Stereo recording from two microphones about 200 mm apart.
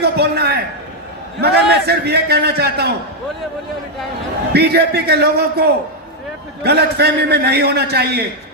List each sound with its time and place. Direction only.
0.0 s a sound: 55° right (ahead or behind)
1.4 s a man's voice: 55° right (ahead or behind)
4.5 s a man's voice: 55° right (ahead or behind)